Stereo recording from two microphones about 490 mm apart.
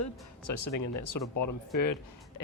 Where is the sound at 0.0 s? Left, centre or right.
Left.